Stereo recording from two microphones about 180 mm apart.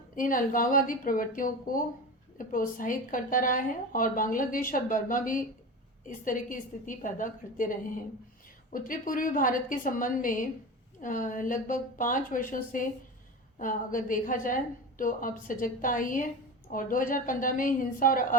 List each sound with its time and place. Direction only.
0.2 s a woman's voice: 50° left (ahead or behind)